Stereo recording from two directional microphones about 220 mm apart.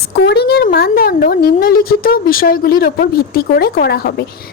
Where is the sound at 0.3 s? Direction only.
50° left (ahead or behind).